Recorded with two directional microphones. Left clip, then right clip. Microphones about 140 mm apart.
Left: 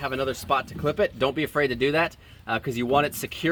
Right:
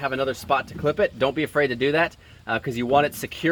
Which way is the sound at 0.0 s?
45° right (ahead or behind).